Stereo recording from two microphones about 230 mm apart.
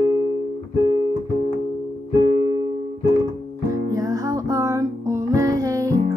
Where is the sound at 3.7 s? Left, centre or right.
Centre.